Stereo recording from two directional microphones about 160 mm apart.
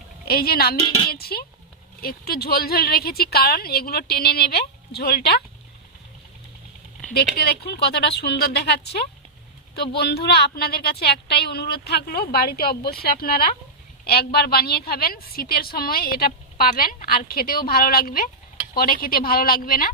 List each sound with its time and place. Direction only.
0.3 s a woman's voice: 75° left (ahead or behind)
0.8 s speech: 40° left (ahead or behind)
1.1 s a woman's voice: 75° left (ahead or behind)
7.3 s a woman's voice: 85° left; by 19.9 s 65° left (ahead or behind)